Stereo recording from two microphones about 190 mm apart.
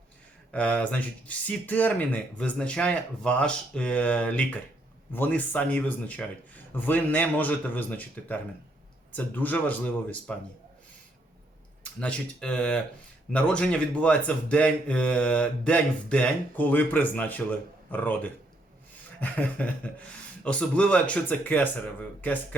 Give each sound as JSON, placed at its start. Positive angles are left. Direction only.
{"t": 0.5, "sound": "speech", "side_deg": 5}
{"t": 11.8, "sound": "speech", "side_deg": 5}